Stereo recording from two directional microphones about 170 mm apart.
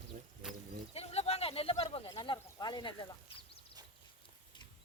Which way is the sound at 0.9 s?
40° left (ahead or behind).